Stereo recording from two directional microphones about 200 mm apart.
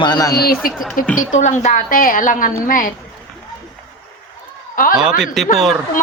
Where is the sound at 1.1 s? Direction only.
40° left (ahead or behind).